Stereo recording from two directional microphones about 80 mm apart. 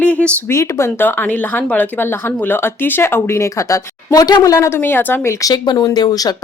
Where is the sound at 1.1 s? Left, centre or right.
Left.